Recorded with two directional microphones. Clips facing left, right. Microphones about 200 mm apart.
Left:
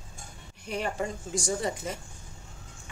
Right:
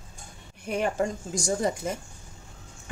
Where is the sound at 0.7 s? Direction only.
55° right (ahead or behind).